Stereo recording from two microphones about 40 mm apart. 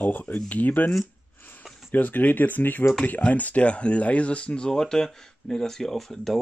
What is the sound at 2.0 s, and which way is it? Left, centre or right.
Speech, left.